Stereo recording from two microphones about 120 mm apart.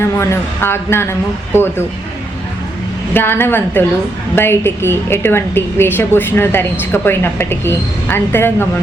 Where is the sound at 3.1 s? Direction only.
20° left (ahead or behind).